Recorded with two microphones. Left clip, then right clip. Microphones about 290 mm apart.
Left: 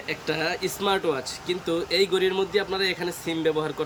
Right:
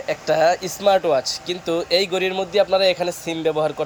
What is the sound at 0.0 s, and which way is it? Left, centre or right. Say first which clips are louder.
A man's voice: right 10 dB; centre.